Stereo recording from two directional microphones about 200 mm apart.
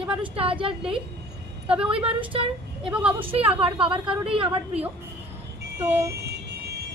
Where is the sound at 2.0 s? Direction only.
25° right (ahead or behind).